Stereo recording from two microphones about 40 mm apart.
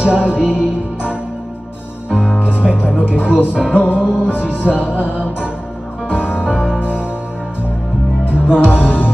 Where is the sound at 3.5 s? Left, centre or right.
Right.